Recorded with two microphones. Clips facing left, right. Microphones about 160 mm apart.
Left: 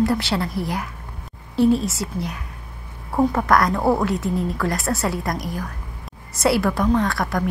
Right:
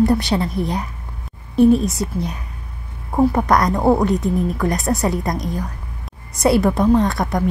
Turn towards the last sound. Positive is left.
turn(degrees=-20)  # may be behind; listen again after turning